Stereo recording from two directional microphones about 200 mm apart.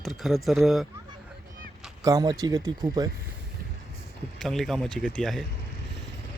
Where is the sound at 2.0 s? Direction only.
20° right (ahead or behind).